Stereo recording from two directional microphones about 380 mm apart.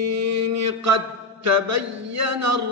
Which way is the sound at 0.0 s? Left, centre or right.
Right.